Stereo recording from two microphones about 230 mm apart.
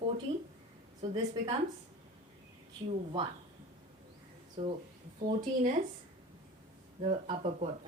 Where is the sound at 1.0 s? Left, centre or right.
Right.